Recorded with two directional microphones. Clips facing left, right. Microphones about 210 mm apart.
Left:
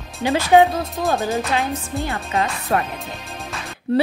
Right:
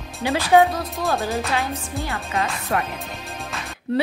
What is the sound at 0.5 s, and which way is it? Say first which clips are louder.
Speech: left 2 dB; 20° left (ahead or behind).